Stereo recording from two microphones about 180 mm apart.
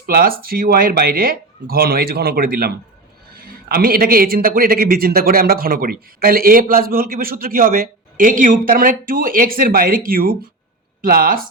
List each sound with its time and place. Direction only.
0.0 s a man's voice: 55° right (ahead or behind)